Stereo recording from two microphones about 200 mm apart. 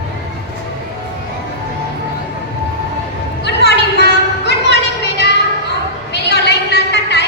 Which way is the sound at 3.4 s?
55° left (ahead or behind).